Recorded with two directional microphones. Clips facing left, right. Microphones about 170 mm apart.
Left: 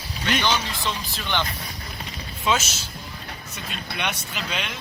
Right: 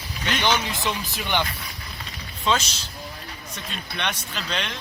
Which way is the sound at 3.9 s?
10° left (ahead or behind).